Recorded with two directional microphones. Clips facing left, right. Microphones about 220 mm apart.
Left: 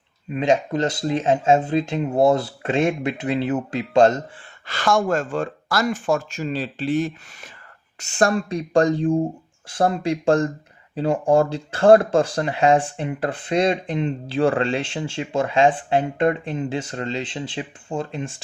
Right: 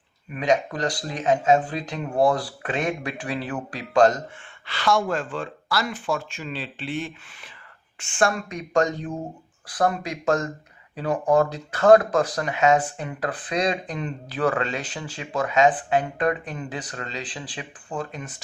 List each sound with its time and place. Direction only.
0.3 s speech: 25° left (ahead or behind)
4.6 s speech: 45° left (ahead or behind); by 18.4 s 30° left (ahead or behind)